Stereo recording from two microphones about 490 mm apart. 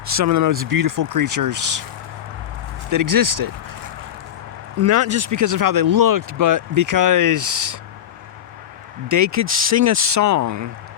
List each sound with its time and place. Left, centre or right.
0.0 s speech: right
2.9 s speech: right
4.8 s speech: right
9.0 s speech: right